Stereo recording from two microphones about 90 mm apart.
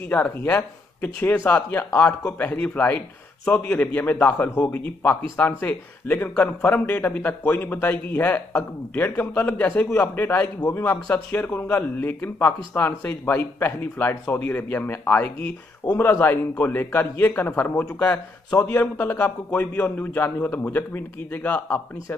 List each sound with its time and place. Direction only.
0.0 s speech: 20° left (ahead or behind)
18.6 s speech: 25° left (ahead or behind)